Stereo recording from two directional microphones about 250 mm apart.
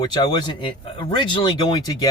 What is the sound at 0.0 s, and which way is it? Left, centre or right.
Speech, centre.